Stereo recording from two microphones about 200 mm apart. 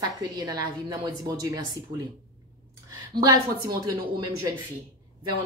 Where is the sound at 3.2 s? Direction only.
20° right (ahead or behind).